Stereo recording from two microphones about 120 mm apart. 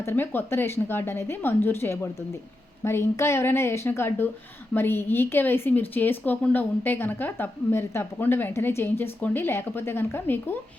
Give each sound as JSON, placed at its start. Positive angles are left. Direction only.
{"t": 0.0, "sound": "a woman's voice", "side_deg": 15}